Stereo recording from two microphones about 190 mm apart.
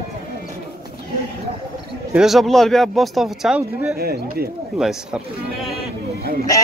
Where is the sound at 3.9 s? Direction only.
55° right (ahead or behind).